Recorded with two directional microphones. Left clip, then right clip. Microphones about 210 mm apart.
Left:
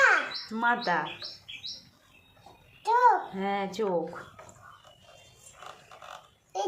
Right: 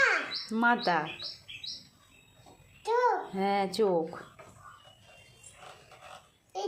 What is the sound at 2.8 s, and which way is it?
Speech, 10° right (ahead or behind).